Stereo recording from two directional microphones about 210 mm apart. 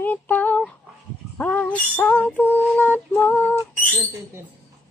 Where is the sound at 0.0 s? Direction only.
10° left (ahead or behind).